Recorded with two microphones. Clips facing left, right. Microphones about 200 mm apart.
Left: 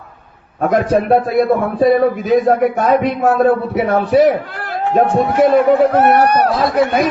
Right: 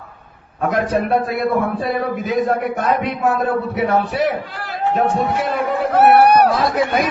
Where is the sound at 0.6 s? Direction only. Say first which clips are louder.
Left 4 dB; 45° left (ahead or behind).